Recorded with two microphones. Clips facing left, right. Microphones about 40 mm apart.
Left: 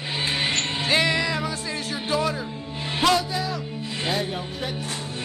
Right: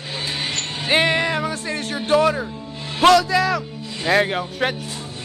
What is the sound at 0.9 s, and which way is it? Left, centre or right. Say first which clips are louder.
Speech: right 5 dB; right.